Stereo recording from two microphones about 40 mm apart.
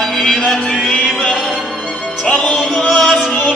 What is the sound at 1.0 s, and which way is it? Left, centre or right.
Music, centre.